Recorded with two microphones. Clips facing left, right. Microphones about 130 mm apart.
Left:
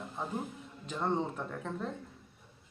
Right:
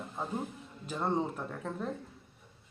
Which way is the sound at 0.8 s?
5° right (ahead or behind).